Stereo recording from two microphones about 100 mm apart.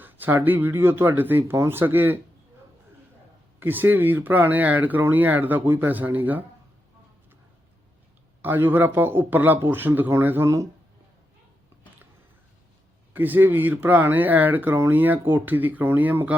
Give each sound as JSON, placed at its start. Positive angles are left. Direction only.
{"t": 0.0, "sound": "speech", "side_deg": -20}
{"t": 3.6, "sound": "speech", "side_deg": -20}
{"t": 8.4, "sound": "speech", "side_deg": -20}
{"t": 13.1, "sound": "speech", "side_deg": -20}